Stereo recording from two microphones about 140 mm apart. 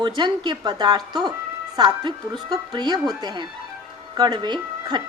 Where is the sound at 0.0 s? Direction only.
35° right (ahead or behind).